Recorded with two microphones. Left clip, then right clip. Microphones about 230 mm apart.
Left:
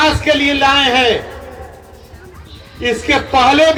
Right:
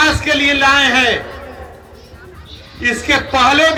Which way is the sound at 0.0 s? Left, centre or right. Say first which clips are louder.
Even; centre.